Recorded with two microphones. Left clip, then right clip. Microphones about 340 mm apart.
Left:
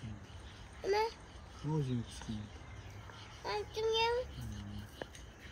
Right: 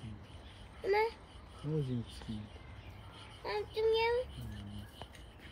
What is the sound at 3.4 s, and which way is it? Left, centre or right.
Child singing, centre.